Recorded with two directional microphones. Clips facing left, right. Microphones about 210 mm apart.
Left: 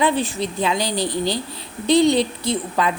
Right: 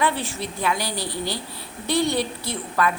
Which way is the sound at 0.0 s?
15° left (ahead or behind).